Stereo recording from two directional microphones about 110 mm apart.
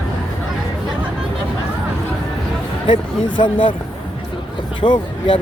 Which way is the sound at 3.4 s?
50° left (ahead or behind).